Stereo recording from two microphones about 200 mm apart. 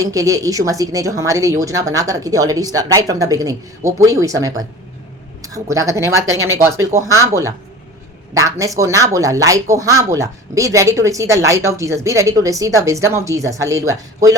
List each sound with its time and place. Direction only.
0.0 s speech: 15° right (ahead or behind)